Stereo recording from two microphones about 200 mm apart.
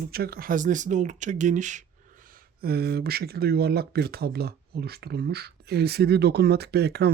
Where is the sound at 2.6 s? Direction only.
50° right (ahead or behind).